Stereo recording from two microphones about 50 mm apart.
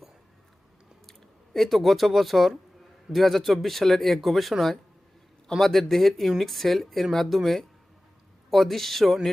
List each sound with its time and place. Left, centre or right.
1.5 s speech: centre